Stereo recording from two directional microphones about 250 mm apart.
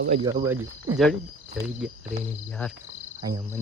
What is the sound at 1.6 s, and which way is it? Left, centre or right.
Speech, centre.